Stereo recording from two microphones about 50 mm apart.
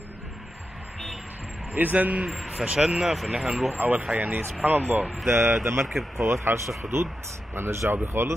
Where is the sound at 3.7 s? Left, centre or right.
Right.